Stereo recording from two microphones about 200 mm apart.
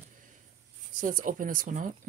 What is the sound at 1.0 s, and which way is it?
Speech, 40° right (ahead or behind).